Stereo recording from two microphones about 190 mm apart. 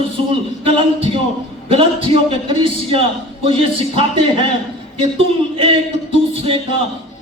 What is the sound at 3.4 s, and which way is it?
A man's voice, 30° right (ahead or behind).